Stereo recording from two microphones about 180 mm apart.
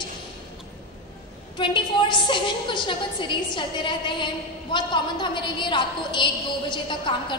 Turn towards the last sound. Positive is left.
turn(degrees=25)  # may be behind; listen again after turning